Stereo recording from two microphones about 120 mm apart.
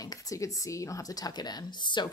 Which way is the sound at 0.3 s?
25° left (ahead or behind).